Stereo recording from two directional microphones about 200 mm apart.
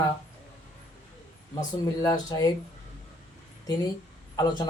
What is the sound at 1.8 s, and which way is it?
Speech, 20° left (ahead or behind).